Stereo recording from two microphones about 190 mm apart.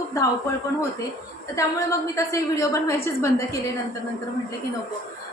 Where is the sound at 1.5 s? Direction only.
15° left (ahead or behind).